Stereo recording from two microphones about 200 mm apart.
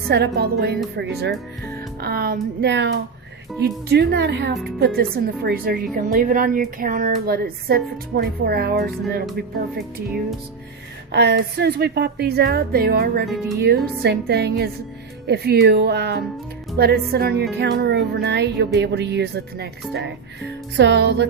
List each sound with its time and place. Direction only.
0.1 s a woman's voice: 55° right (ahead or behind)
10.1 s music: centre (ahead or behind)
11.1 s a woman's voice: 55° right (ahead or behind)